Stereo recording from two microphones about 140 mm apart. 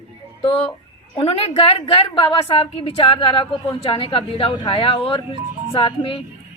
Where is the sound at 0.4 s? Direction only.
40° left (ahead or behind).